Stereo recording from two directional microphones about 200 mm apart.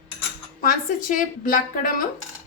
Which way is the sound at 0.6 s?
45° left (ahead or behind).